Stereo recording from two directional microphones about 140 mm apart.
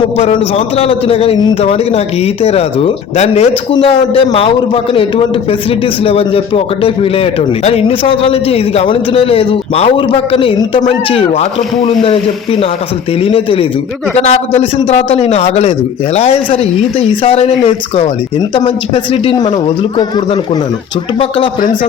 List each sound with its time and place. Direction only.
0.2 s a man's voice: 45° left (ahead or behind)
18.6 s a man's voice: 45° left (ahead or behind)